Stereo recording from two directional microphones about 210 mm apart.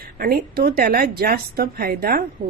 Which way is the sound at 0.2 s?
45° right (ahead or behind).